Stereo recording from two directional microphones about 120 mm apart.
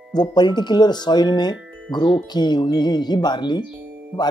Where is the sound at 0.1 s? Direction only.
35° left (ahead or behind).